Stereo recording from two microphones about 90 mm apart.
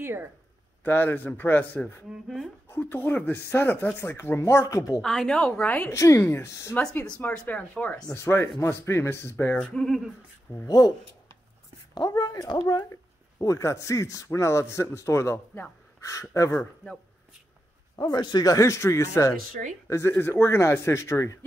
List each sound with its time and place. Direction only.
0.0 s speech: 25° right (ahead or behind)
0.8 s speech: 20° left (ahead or behind)
2.0 s speech: centre (ahead or behind)
2.7 s speech: 25° left (ahead or behind)
5.0 s a woman's voice: 5° left (ahead or behind)
5.9 s speech: 30° left (ahead or behind)
7.2 s speech: 20° left (ahead or behind)
8.2 s speech: 30° left (ahead or behind)
9.6 s speech: 10° left (ahead or behind)
10.5 s speech: 25° left (ahead or behind)
12.2 s speech: 45° left (ahead or behind)
12.9 s speech: 35° left (ahead or behind)
17.9 s speech: 50° left (ahead or behind); by 21.5 s 35° left (ahead or behind)